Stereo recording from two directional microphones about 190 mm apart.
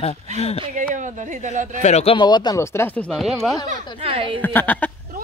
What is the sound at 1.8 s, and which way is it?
Speech, 35° left (ahead or behind).